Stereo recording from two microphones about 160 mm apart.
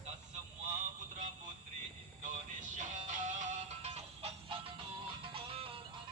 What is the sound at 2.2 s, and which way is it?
Music, 50° right (ahead or behind).